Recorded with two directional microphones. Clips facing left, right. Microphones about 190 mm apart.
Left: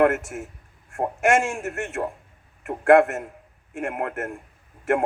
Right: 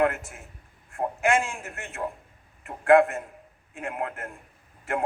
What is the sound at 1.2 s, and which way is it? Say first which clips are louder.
Speech: left 4 dB; 75° left (ahead or behind).